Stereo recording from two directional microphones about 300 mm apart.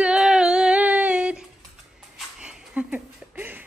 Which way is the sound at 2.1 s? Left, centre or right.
Centre.